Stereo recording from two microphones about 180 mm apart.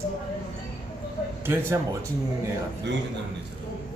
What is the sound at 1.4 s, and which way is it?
Speech, 15° right (ahead or behind).